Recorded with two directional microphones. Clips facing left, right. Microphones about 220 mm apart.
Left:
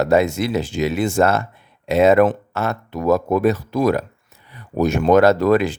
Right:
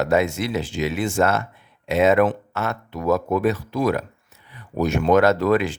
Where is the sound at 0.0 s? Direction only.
35° left (ahead or behind).